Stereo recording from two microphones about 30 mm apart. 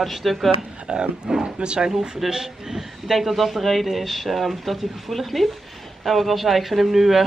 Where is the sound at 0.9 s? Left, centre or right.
Right.